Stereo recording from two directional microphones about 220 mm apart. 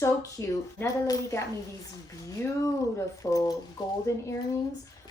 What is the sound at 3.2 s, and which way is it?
Speech, 15° left (ahead or behind).